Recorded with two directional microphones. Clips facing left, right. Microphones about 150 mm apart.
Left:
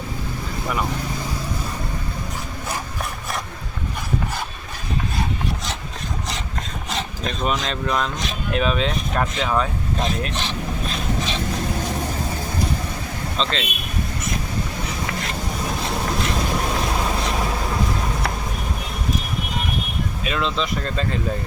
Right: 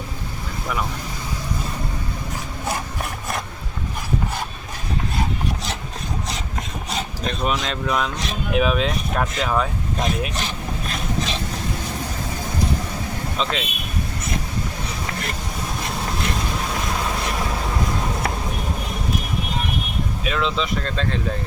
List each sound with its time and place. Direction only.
6.9 s speech: centre (ahead or behind)
13.3 s speech: 10° right (ahead or behind)
20.2 s speech: centre (ahead or behind)